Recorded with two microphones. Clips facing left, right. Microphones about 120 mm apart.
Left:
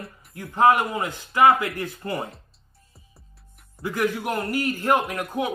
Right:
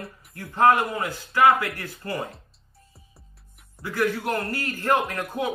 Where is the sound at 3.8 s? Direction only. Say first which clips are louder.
Even; 15° left (ahead or behind).